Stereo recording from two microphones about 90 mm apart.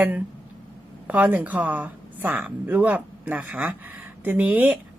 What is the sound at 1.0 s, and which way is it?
Speech, 15° right (ahead or behind).